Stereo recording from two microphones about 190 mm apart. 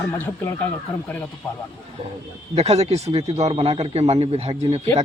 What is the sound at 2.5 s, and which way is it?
Speech, 35° right (ahead or behind).